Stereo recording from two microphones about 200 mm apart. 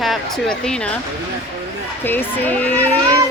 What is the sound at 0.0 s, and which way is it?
Speech, centre (ahead or behind).